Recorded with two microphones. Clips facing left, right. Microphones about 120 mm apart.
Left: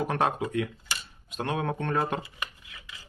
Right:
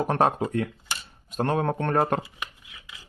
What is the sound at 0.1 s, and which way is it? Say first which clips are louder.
Speech: right 4 dB; 40° right (ahead or behind).